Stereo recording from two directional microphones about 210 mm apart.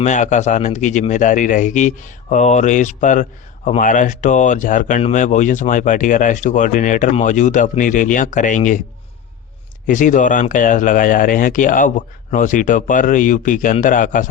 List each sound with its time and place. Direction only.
0.0 s a man's voice: 35° left (ahead or behind)
9.8 s a man's voice: 40° left (ahead or behind)